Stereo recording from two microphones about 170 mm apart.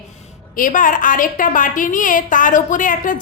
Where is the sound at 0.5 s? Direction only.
50° left (ahead or behind).